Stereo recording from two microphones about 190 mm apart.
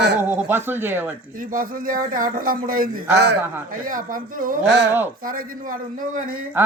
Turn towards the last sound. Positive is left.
turn(degrees=-45)  # may be behind; listen again after turning